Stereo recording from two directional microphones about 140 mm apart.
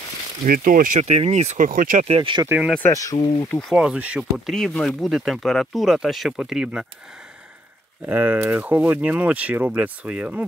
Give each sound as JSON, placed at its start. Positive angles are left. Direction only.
{"t": 0.5, "sound": "speech", "side_deg": -75}
{"t": 2.0, "sound": "speech", "side_deg": -40}
{"t": 2.8, "sound": "speech", "side_deg": 25}
{"t": 3.7, "sound": "speech", "side_deg": -5}
{"t": 8.0, "sound": "speech", "side_deg": -15}